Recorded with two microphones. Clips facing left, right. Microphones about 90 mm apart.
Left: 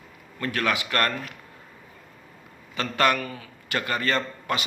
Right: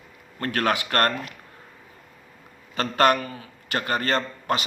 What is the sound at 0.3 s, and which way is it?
Speech, 45° right (ahead or behind).